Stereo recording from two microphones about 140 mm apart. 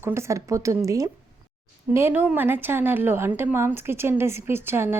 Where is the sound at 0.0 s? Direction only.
20° right (ahead or behind).